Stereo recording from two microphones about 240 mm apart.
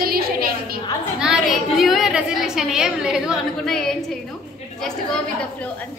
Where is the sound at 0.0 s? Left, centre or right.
Right.